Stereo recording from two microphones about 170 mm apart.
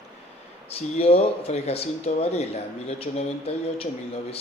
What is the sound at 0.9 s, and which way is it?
A man's voice, 35° left (ahead or behind).